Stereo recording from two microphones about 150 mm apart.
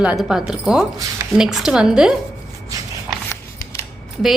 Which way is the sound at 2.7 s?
25° right (ahead or behind).